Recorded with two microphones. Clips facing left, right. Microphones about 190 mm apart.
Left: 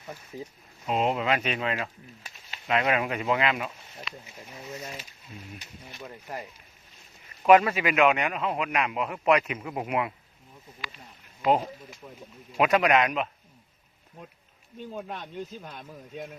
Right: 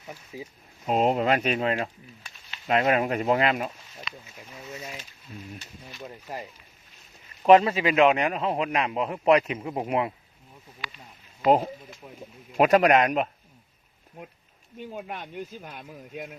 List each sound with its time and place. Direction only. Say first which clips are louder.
0.3 s speech: even; 10° right (ahead or behind)
0.9 s a man's voice: right 3 dB; 40° right (ahead or behind)
7.4 s a man's voice: right 2 dB; 30° right (ahead or behind)
12.0 s speech: left 1 dB; 30° right (ahead or behind)
12.5 s a man's voice: right 3 dB; 40° right (ahead or behind)
14.8 s speech: even; 10° right (ahead or behind)